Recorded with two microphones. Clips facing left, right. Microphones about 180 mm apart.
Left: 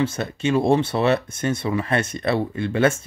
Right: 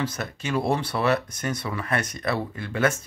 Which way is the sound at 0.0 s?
25° left (ahead or behind).